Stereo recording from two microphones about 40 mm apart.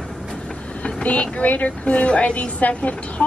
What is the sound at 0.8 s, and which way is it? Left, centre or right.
A woman's voice, left.